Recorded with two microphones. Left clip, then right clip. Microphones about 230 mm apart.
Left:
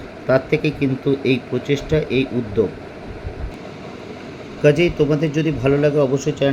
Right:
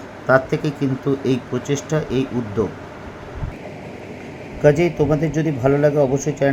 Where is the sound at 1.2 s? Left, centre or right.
Left.